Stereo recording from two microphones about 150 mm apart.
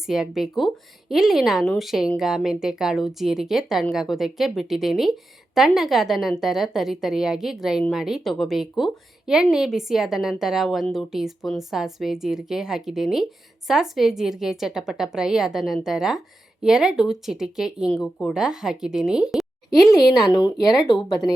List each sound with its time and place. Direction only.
0.0 s a woman's voice: centre (ahead or behind)
19.7 s speech: 25° left (ahead or behind)